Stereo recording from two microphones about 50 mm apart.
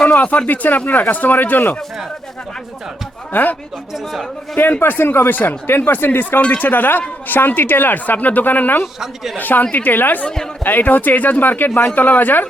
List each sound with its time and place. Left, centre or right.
0.1 s speech: left
3.3 s speech: left
4.8 s speech: left
9.0 s speech: centre
9.4 s speech: left